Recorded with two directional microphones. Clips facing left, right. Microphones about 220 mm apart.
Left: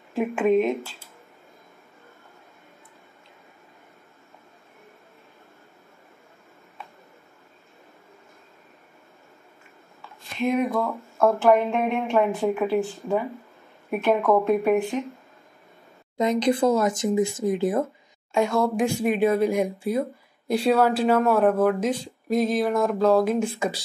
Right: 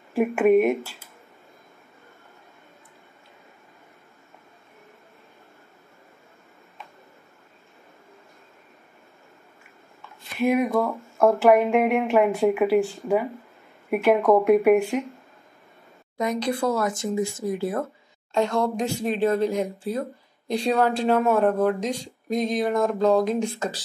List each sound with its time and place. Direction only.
0.1 s speech: 10° right (ahead or behind)
10.3 s speech: 10° right (ahead or behind)
16.2 s speech: 20° left (ahead or behind)
18.3 s speech: 10° left (ahead or behind)